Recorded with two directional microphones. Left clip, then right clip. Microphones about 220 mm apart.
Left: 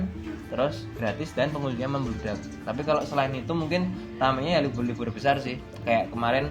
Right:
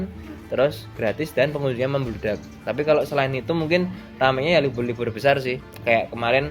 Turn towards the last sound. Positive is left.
turn(degrees=-50)  # may be behind; listen again after turning